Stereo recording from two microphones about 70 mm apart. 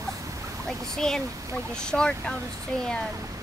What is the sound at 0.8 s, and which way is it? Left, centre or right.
Speech, centre.